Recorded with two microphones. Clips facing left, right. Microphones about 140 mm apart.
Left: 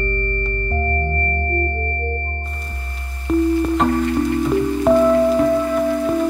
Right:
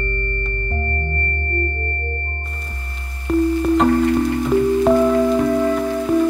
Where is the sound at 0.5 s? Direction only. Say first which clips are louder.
Left 3 dB; 40° left (ahead or behind).